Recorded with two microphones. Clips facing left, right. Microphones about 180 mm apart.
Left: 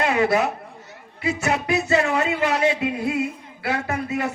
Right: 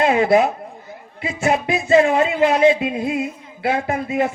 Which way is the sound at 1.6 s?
20° right (ahead or behind).